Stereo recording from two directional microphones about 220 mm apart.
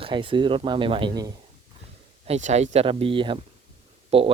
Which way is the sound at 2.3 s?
30° right (ahead or behind).